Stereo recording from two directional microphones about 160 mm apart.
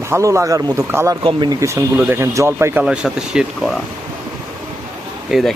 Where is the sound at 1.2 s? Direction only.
25° right (ahead or behind).